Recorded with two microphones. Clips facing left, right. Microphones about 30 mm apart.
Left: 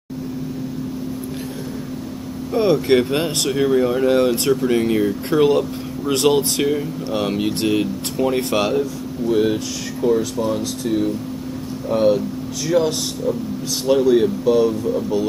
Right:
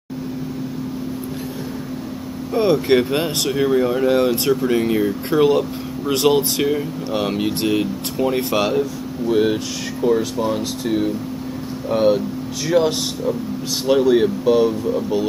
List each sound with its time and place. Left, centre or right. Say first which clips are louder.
2.5 s speech: even; centre